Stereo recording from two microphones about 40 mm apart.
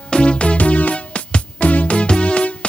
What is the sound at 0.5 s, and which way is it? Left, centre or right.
Music, left.